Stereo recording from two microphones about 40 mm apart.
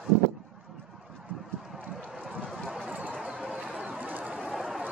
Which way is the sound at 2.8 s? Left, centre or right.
Right.